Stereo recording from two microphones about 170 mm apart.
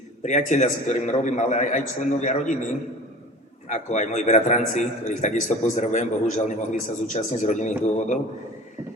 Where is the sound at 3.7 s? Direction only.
45° left (ahead or behind).